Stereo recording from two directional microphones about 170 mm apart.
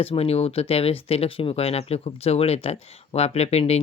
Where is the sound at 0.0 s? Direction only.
35° left (ahead or behind).